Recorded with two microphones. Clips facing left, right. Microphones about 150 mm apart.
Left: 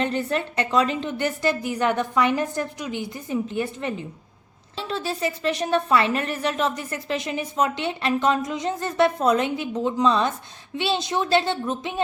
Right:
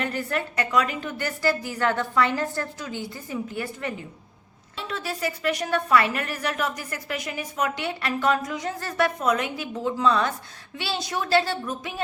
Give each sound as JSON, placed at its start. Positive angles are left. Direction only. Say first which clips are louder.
{"t": 0.0, "sound": "a woman's voice", "louder": "left 4 dB", "side_deg": 25}